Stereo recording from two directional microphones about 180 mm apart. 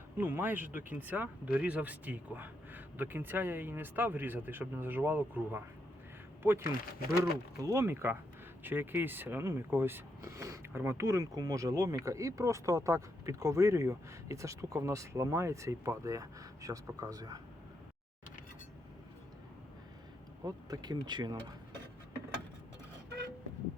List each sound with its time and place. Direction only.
0.2 s speech: 10° right (ahead or behind)
20.4 s speech: 20° right (ahead or behind)